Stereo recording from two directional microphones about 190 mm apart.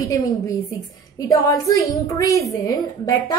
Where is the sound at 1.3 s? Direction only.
15° left (ahead or behind).